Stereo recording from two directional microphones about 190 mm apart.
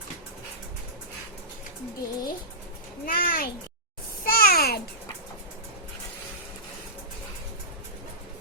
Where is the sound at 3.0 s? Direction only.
50° left (ahead or behind).